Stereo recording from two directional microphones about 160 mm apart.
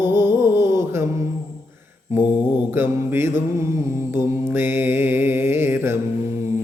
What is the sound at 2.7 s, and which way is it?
Mantra, 15° right (ahead or behind).